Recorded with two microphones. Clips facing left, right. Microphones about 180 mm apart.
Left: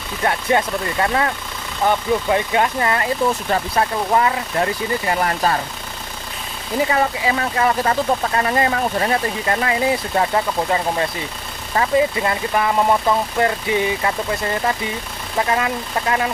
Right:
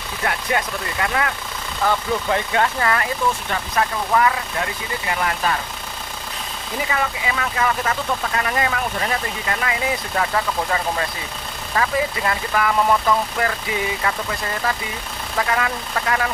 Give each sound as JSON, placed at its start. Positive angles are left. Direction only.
{"t": 0.2, "sound": "speech", "side_deg": 30}
{"t": 1.9, "sound": "speech", "side_deg": 20}
{"t": 6.9, "sound": "speech", "side_deg": 35}
{"t": 15.3, "sound": "speech", "side_deg": 25}